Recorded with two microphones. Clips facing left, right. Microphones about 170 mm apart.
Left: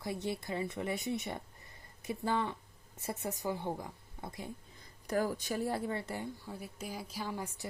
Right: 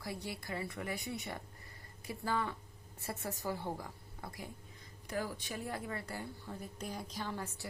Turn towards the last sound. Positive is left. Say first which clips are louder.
# left 2 dB
turn(degrees=15)  # may be behind; listen again after turning